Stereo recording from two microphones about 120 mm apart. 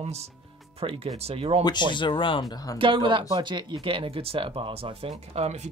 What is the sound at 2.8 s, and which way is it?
Speech, 45° right (ahead or behind).